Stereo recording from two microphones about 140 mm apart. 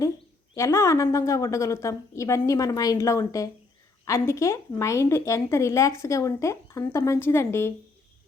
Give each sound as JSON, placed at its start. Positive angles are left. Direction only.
{"t": 0.5, "sound": "a woman's voice", "side_deg": 20}